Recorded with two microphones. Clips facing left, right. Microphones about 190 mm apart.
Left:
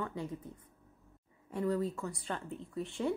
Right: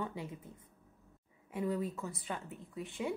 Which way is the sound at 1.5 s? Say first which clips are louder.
Left 3 dB; 15° right (ahead or behind).